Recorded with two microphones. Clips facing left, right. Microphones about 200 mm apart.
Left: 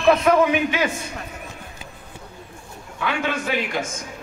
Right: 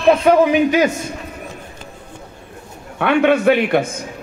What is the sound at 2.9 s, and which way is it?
Speech, 65° right (ahead or behind).